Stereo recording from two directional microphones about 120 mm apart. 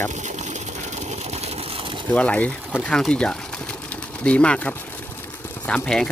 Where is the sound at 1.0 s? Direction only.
65° right (ahead or behind); by 1.9 s 50° right (ahead or behind).